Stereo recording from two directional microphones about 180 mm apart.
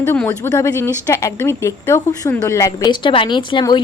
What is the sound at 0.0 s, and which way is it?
A woman's voice, 10° left (ahead or behind).